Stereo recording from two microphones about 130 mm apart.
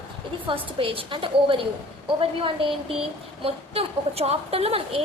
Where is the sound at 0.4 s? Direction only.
45° right (ahead or behind).